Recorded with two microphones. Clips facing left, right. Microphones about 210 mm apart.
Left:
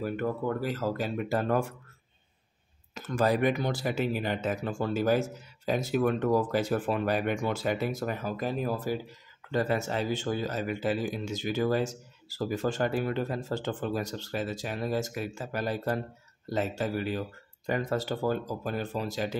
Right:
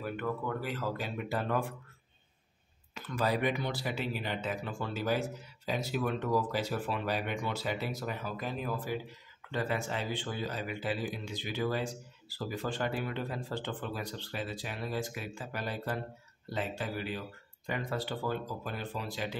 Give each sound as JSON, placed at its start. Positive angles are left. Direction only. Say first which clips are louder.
{"t": 0.0, "sound": "speech", "louder": "left 5 dB", "side_deg": 40}
{"t": 2.9, "sound": "speech", "louder": "left 5 dB", "side_deg": 45}